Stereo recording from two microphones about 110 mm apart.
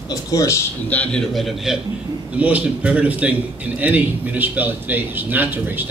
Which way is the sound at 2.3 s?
10° right (ahead or behind).